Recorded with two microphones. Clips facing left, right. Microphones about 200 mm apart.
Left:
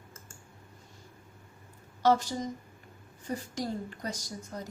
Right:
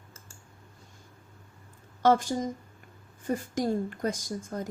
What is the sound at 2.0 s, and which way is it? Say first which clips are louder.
A woman's voice: right 3 dB; 50° right (ahead or behind).